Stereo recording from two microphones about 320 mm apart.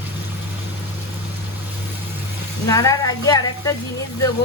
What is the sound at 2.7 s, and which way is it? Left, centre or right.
A woman's voice, centre.